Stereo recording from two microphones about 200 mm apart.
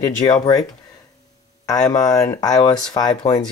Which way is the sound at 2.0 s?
15° left (ahead or behind).